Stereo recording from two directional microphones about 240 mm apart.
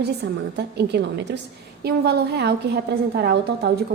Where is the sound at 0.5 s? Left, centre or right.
Right.